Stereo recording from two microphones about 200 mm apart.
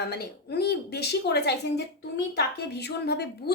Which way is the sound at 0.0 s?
55° left (ahead or behind).